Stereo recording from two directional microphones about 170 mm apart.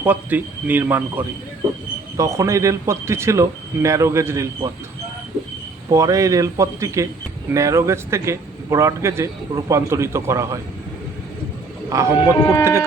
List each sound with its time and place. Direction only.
0.0 s a man's voice: 10° right (ahead or behind)
5.9 s a man's voice: 20° right (ahead or behind)
11.9 s a man's voice: 15° right (ahead or behind)
12.3 s speech: 20° left (ahead or behind)